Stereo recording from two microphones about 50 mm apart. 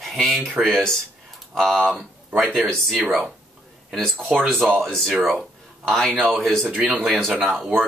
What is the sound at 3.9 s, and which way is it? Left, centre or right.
Speech, centre.